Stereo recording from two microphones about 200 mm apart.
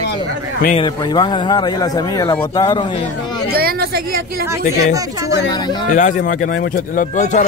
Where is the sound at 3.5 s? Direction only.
50° right (ahead or behind).